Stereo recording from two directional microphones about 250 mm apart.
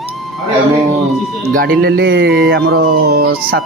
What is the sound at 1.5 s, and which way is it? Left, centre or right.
Speech, right.